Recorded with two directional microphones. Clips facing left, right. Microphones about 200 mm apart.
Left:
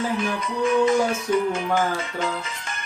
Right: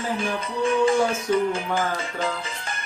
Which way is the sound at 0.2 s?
30° right (ahead or behind).